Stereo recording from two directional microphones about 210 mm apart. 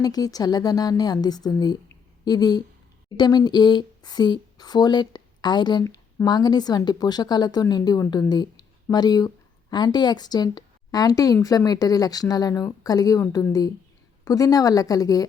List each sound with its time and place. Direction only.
0.0 s a woman's voice: 20° left (ahead or behind)